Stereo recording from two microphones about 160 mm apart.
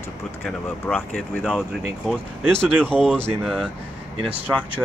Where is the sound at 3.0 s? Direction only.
5° left (ahead or behind).